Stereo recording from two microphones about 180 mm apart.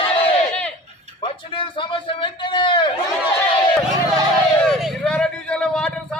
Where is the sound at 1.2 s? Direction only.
30° left (ahead or behind).